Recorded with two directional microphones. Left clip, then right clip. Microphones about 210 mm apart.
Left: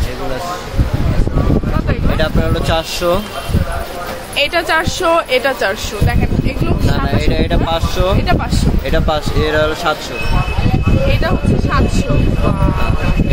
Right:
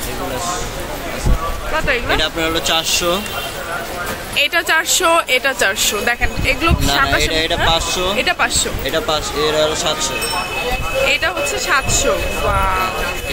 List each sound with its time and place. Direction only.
2.1 s speech: 35° left (ahead or behind)
4.4 s speech: 10° right (ahead or behind)
6.9 s speech: 35° left (ahead or behind)
8.2 s speech: centre (ahead or behind)
8.9 s speech: 40° left (ahead or behind)
11.1 s speech: 5° right (ahead or behind)